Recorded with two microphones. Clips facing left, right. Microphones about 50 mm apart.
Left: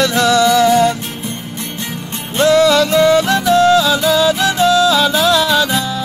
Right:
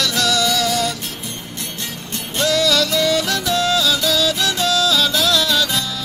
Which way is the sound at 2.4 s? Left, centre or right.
Left.